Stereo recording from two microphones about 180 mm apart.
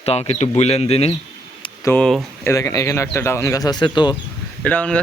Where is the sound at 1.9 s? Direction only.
5° left (ahead or behind).